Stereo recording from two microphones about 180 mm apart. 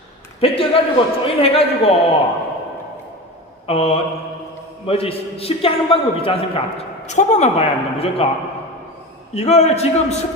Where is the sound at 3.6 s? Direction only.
30° left (ahead or behind).